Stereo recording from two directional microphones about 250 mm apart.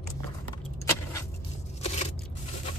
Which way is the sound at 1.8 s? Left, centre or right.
Left.